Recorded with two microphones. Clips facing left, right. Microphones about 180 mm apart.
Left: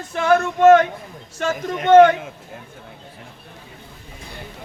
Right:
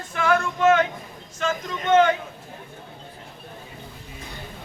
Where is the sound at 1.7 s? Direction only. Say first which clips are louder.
Left 8 dB; 65° left (ahead or behind).